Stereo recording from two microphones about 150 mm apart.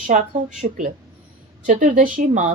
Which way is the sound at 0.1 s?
50° right (ahead or behind).